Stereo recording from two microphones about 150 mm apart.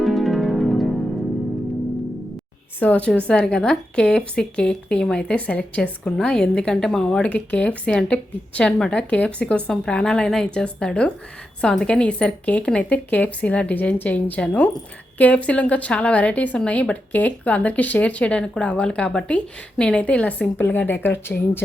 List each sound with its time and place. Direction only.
0.0 s music: centre (ahead or behind)
2.8 s speech: 10° left (ahead or behind)